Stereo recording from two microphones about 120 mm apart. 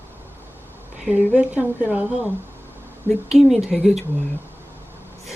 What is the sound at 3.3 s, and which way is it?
Speech, 5° right (ahead or behind).